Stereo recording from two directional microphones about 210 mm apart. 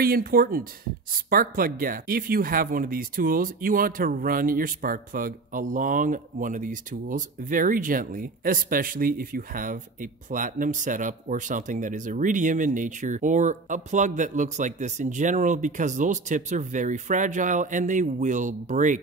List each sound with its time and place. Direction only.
0.0 s speech: 45° right (ahead or behind)